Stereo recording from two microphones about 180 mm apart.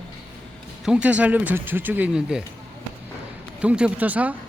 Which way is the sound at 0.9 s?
5° right (ahead or behind).